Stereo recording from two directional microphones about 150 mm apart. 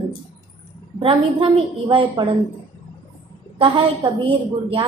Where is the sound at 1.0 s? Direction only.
35° right (ahead or behind).